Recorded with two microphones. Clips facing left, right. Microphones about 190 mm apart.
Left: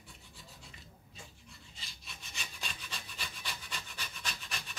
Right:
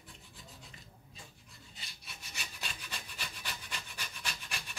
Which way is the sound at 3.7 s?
10° right (ahead or behind).